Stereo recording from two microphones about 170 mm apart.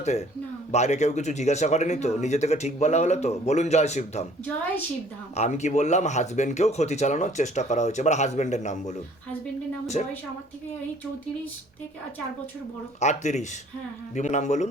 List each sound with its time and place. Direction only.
0.0 s speech: 40° left (ahead or behind)
5.4 s speech: 40° left (ahead or behind)
13.0 s speech: 45° left (ahead or behind)